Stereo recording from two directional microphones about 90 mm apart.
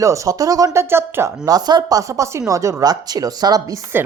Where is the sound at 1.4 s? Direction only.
50° right (ahead or behind).